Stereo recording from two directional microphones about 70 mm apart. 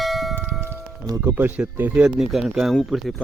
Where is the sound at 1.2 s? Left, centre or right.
Right.